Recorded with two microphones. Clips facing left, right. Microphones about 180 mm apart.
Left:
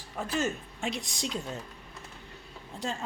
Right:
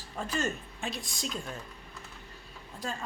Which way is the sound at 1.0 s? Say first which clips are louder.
Left 3 dB; 80° left.